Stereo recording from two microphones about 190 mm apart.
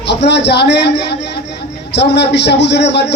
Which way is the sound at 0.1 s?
65° left (ahead or behind).